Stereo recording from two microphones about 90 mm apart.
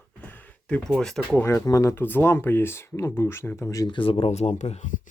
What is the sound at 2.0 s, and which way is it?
Speech, 25° left (ahead or behind).